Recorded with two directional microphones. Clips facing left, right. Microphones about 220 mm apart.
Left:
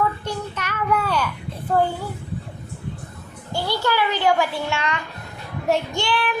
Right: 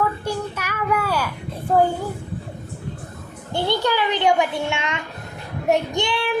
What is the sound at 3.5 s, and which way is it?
A child's voice, 20° right (ahead or behind).